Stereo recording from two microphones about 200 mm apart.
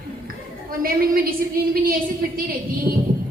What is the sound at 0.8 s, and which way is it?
A woman's voice, 45° right (ahead or behind).